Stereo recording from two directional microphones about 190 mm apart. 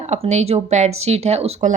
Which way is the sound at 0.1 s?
35° right (ahead or behind).